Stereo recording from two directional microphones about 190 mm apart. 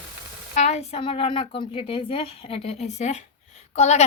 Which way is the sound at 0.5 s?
35° left (ahead or behind).